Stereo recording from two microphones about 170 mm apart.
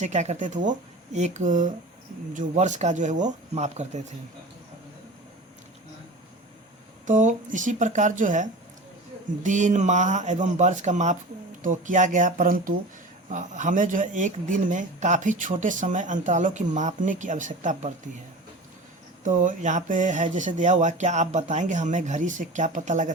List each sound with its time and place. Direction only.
0.0 s a man's voice: 45° right (ahead or behind)
7.1 s a man's voice: 45° right (ahead or behind)
19.2 s a man's voice: 45° right (ahead or behind)